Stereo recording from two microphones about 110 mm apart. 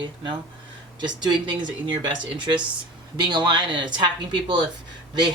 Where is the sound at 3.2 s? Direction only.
45° right (ahead or behind).